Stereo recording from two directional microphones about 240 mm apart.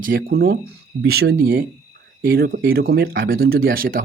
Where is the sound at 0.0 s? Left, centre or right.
Right.